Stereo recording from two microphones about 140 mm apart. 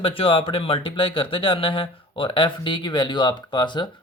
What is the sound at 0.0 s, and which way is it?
Speech, 40° left (ahead or behind).